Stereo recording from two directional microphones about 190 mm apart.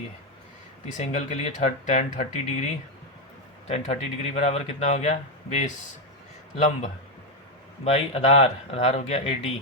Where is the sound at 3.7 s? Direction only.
35° left (ahead or behind).